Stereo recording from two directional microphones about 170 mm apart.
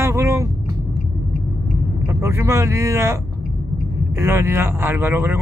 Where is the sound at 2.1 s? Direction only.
15° right (ahead or behind).